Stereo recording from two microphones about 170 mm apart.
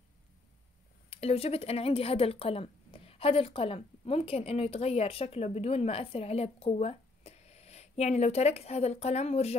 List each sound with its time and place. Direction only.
1.1 s speech: 35° left (ahead or behind)